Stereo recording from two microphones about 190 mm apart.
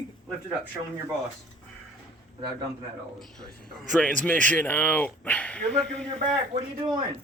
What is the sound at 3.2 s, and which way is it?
Speech, 5° left (ahead or behind).